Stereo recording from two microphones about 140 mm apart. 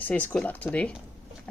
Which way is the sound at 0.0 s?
10° left (ahead or behind).